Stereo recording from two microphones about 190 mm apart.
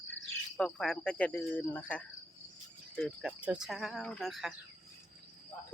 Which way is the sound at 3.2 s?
5° right (ahead or behind).